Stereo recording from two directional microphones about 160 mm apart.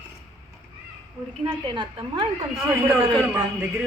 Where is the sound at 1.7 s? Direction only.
30° right (ahead or behind).